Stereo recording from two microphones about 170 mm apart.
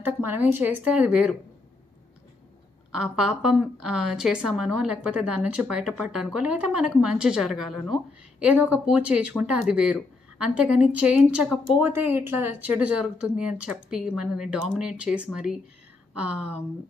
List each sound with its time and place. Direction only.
0.0 s speech: 10° right (ahead or behind)
2.9 s a woman's voice: 5° right (ahead or behind)